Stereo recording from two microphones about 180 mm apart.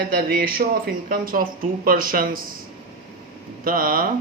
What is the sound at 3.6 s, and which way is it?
Speech, 50° right (ahead or behind).